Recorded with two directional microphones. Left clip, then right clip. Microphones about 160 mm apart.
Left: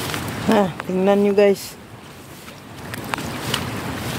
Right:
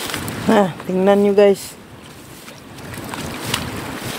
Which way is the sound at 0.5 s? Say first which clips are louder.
Right 3 dB; 25° right (ahead or behind).